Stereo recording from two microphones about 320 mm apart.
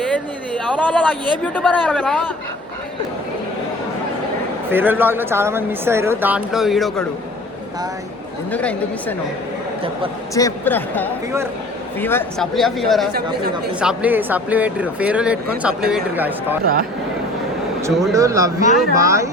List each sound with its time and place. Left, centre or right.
0.0 s a sound: centre
1.5 s speech: centre
4.7 s speech: centre
8.5 s speech: centre
10.3 s speech: centre
13.1 s speech: right
13.7 s speech: centre
17.8 s speech: centre